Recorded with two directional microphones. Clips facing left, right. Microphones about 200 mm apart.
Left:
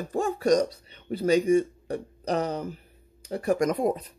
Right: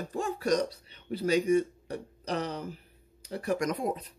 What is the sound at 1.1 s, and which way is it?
Speech, 45° left (ahead or behind).